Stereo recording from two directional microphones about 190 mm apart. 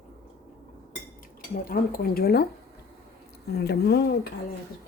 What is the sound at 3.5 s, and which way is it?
Speech, 60° left (ahead or behind).